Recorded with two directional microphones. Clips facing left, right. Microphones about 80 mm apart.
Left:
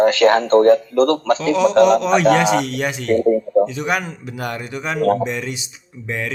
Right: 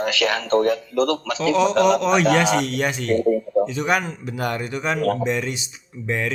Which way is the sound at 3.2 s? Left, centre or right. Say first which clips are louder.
Left 5 dB; left.